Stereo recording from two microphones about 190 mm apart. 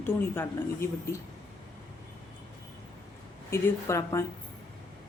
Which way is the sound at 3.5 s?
15° left (ahead or behind).